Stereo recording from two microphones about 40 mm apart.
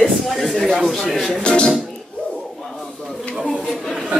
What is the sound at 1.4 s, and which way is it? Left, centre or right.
Speech, left.